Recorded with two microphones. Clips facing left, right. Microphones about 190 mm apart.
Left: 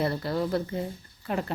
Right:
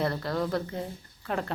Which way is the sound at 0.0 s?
5° left (ahead or behind).